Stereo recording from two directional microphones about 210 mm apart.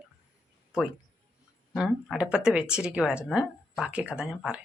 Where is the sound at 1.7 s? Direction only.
Centre (ahead or behind).